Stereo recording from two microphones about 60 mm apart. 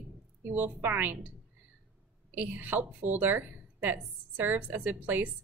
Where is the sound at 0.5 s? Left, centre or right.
Right.